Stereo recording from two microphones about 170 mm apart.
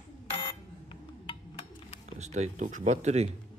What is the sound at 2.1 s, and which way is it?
Speech, 40° right (ahead or behind).